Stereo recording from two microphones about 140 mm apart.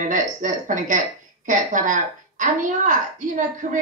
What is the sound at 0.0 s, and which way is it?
A woman's voice, 65° right (ahead or behind).